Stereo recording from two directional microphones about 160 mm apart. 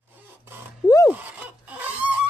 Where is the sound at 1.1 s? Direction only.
10° right (ahead or behind).